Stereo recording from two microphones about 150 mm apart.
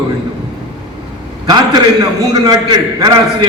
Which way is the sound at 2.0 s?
25° right (ahead or behind).